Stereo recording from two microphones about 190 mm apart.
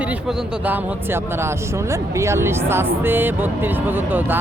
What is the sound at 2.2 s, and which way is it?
Speech, 15° right (ahead or behind).